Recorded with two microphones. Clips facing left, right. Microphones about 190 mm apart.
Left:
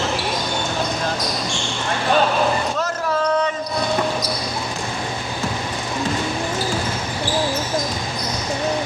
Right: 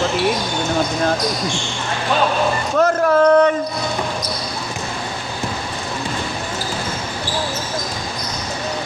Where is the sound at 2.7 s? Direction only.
55° right (ahead or behind).